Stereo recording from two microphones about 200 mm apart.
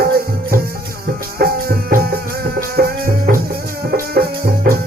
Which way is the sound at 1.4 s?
50° right (ahead or behind).